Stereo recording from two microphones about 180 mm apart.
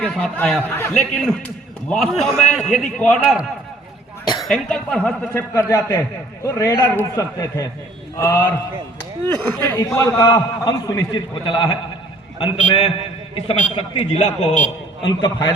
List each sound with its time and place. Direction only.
0.0 s a man's voice: 5° left (ahead or behind)
4.4 s a man's voice: 5° left (ahead or behind); by 14.5 s 35° left (ahead or behind)
15.2 s a man's voice: 25° left (ahead or behind)